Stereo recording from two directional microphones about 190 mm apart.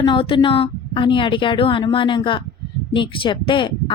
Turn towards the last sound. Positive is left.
turn(degrees=25)  # may be behind; listen again after turning